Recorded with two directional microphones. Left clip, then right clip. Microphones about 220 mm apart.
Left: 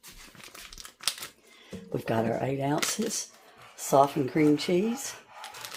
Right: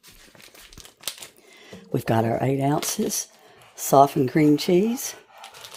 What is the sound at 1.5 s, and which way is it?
Speech, 50° right (ahead or behind).